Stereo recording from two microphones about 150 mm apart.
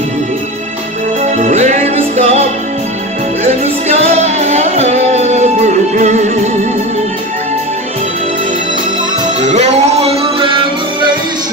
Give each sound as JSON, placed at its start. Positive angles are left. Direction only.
{"t": 1.3, "sound": "music", "side_deg": -50}
{"t": 3.9, "sound": "music", "side_deg": -45}
{"t": 9.4, "sound": "music", "side_deg": -50}